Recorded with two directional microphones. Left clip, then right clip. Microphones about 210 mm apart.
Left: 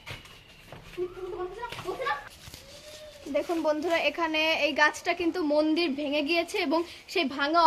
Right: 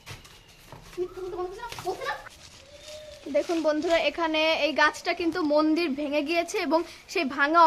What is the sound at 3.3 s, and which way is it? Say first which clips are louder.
A woman's voice: right 2 dB; 15° right (ahead or behind).